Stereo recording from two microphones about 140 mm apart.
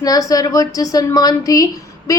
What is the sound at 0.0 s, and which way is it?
Speech, 25° left (ahead or behind).